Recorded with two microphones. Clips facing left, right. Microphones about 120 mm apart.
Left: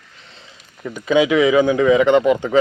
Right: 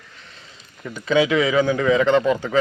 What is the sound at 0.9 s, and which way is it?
Speech, 15° left (ahead or behind).